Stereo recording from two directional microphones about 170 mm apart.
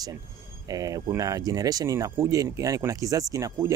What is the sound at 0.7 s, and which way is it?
Speech, 20° right (ahead or behind).